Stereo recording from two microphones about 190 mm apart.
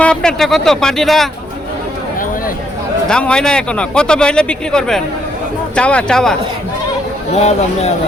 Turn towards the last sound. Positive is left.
turn(degrees=35)  # may be behind; listen again after turning